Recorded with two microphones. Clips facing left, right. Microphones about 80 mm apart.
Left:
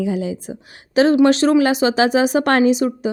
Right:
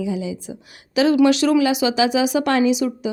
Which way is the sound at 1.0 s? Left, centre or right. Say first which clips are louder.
Left 2 dB; left.